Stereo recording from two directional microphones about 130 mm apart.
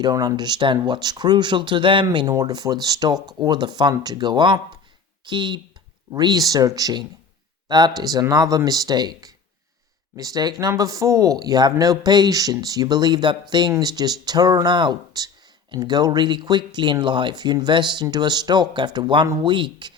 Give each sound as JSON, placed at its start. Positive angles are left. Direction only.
{"t": 0.0, "sound": "speech", "side_deg": -30}